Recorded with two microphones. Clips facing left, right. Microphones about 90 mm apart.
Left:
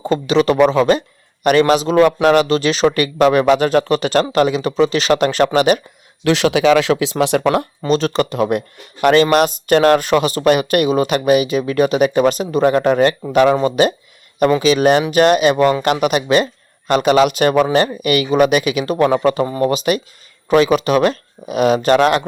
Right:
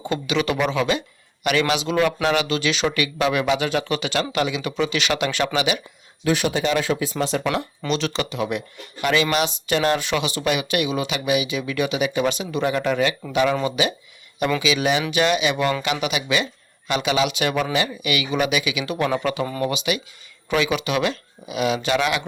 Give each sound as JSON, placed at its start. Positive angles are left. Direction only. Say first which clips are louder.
{"t": 0.0, "sound": "speech", "louder": "left 8 dB", "side_deg": 35}
{"t": 6.2, "sound": "speech", "louder": "left 8 dB", "side_deg": 85}
{"t": 7.4, "sound": "speech", "louder": "left 8 dB", "side_deg": 50}